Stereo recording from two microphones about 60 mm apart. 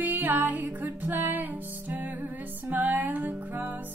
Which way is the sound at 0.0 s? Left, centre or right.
Right.